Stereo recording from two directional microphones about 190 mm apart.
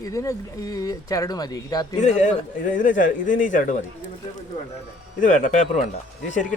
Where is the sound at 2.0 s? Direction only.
40° left (ahead or behind).